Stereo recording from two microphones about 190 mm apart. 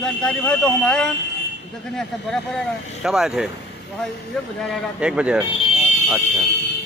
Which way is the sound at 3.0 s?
5° right (ahead or behind).